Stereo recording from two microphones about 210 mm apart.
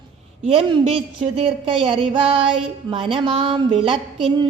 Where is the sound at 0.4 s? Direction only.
25° right (ahead or behind).